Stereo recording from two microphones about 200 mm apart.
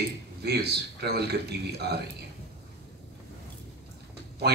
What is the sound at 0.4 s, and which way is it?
Speech, 55° right (ahead or behind).